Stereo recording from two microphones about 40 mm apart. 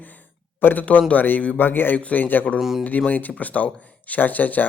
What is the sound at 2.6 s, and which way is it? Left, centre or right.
Speech, centre.